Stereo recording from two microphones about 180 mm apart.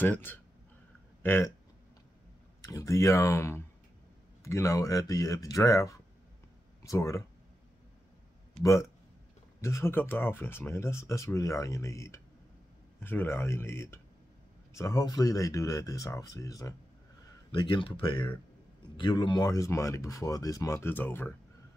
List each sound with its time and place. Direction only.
0.0 s speech: 10° left (ahead or behind)
2.6 s speech: 20° left (ahead or behind)
8.6 s speech: 15° left (ahead or behind)